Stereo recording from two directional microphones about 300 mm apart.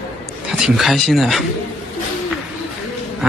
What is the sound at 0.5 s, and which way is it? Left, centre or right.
Speech, centre.